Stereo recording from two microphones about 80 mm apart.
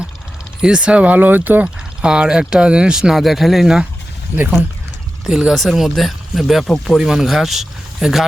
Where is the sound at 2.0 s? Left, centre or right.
Centre.